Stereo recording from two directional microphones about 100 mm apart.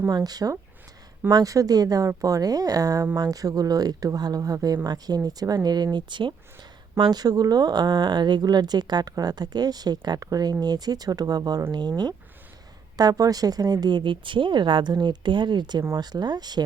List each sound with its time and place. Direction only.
0.1 s speech: 40° right (ahead or behind)